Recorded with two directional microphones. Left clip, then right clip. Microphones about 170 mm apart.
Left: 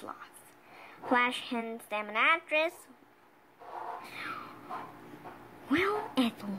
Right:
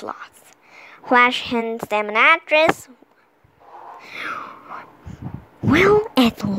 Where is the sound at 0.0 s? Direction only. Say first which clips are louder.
Right 13 dB; 40° right (ahead or behind).